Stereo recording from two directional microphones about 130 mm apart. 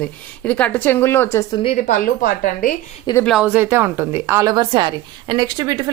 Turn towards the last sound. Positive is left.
turn(degrees=-30)  # may be behind; listen again after turning